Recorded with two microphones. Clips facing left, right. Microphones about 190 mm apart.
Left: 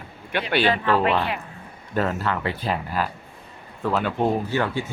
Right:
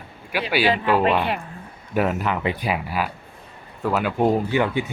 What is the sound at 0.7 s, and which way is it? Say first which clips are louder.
Speech: right 2 dB; 15° right (ahead or behind).